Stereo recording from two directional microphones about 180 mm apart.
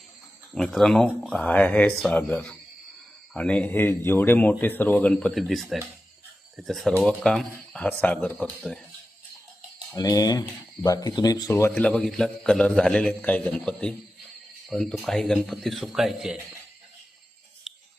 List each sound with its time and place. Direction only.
0.5 s a man's voice: centre (ahead or behind)
9.9 s a man's voice: 20° left (ahead or behind); by 16.4 s 5° right (ahead or behind)